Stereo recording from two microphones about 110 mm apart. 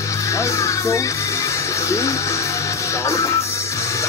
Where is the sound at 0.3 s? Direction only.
30° left (ahead or behind).